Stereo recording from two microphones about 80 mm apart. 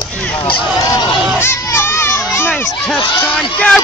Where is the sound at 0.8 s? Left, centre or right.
Left.